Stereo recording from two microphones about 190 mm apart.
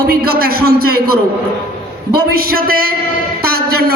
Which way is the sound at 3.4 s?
55° right (ahead or behind).